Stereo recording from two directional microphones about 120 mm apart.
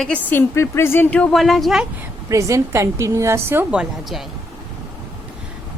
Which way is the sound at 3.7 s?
5° right (ahead or behind).